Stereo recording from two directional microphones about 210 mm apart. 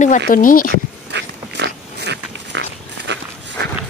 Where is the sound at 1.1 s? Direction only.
55° right (ahead or behind).